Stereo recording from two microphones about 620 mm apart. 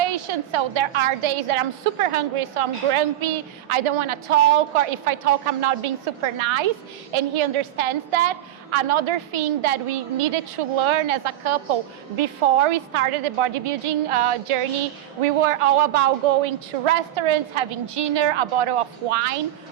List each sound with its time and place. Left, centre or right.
0.0 s a woman's voice: right